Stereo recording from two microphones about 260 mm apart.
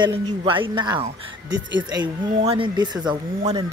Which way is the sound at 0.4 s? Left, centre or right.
Centre.